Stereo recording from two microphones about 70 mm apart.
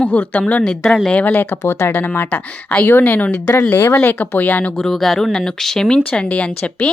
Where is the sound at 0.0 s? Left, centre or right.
Centre.